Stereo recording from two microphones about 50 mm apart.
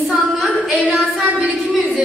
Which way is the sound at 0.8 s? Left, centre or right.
Right.